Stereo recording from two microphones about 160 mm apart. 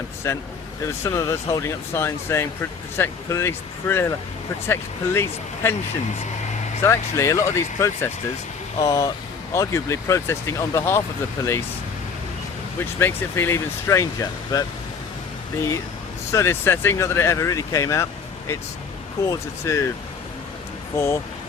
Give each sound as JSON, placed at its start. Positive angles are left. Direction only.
{"t": 0.2, "sound": "speech", "side_deg": 20}
{"t": 6.8, "sound": "speech", "side_deg": 20}
{"t": 12.8, "sound": "speech", "side_deg": 15}
{"t": 16.3, "sound": "speech", "side_deg": 15}
{"t": 20.9, "sound": "speech", "side_deg": 15}